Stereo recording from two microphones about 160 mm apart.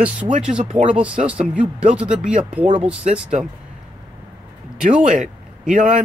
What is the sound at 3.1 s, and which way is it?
Speech, 5° right (ahead or behind).